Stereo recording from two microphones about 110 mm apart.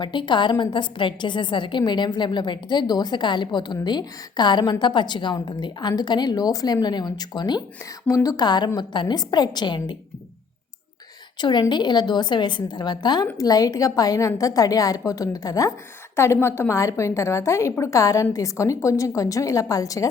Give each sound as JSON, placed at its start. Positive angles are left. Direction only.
{"t": 0.0, "sound": "a woman's voice", "side_deg": 45}
{"t": 11.3, "sound": "a woman's voice", "side_deg": 45}